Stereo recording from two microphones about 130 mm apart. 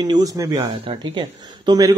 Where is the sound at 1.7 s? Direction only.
30° right (ahead or behind).